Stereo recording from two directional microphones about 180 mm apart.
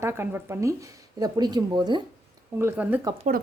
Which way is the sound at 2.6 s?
10° right (ahead or behind).